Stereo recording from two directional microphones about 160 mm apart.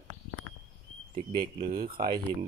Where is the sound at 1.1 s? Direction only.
50° right (ahead or behind).